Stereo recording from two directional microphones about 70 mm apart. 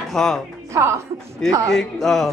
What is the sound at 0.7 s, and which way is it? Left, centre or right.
Speech, right.